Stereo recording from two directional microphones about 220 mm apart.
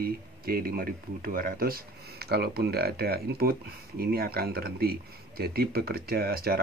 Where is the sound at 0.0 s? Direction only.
40° right (ahead or behind).